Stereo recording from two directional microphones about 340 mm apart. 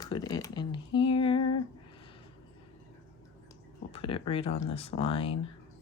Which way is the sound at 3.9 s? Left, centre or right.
Centre.